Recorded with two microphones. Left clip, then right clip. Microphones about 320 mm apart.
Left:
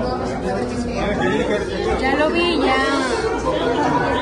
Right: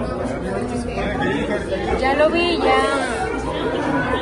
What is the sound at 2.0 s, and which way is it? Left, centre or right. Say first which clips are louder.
Speech: right 2 dB; centre.